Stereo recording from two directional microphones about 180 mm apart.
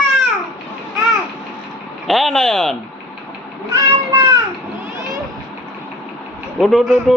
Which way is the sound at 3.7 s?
15° right (ahead or behind).